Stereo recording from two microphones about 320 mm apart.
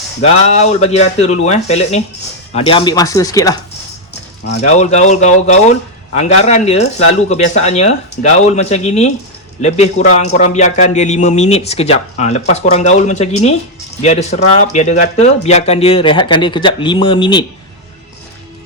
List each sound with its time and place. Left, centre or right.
0.2 s speech: centre
4.4 s speech: left